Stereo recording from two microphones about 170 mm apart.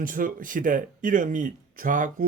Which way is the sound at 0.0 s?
55° right (ahead or behind).